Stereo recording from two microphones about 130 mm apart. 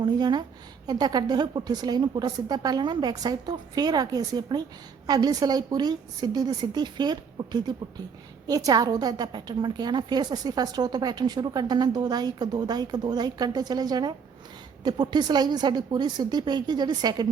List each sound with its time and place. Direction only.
0.0 s a woman's voice: 35° right (ahead or behind)